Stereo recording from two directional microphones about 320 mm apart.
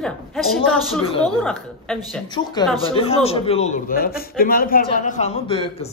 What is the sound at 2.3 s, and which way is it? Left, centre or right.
A man's voice, centre.